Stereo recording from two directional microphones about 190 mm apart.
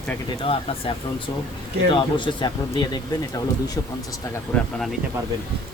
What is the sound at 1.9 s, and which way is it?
Speech, 25° left (ahead or behind).